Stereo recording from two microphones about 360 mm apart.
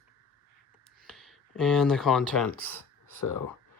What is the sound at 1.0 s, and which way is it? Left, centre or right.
Speech, centre.